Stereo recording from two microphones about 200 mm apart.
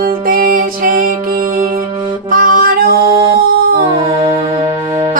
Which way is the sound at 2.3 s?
45° right (ahead or behind).